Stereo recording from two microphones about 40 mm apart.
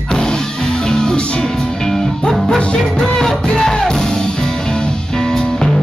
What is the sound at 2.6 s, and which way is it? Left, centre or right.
Music, left.